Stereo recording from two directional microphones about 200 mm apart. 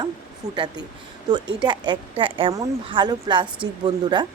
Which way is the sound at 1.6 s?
20° right (ahead or behind).